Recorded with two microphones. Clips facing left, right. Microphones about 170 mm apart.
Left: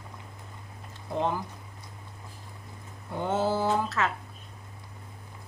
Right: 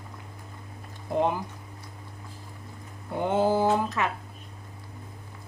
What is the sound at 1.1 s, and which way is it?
Speech, 15° right (ahead or behind).